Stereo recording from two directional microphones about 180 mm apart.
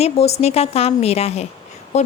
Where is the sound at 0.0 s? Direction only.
35° left (ahead or behind).